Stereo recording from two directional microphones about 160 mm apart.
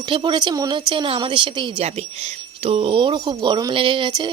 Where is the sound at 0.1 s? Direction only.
30° right (ahead or behind).